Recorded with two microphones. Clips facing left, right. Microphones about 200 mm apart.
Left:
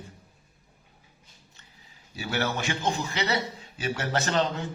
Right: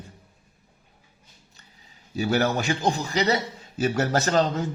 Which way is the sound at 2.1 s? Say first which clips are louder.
Right 7 dB; 40° right (ahead or behind).